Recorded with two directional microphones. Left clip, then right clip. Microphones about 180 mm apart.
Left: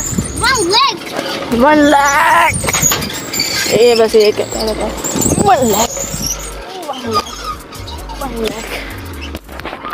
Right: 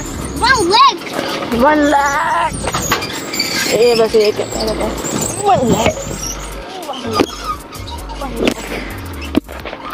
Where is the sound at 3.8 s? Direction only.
60° left (ahead or behind).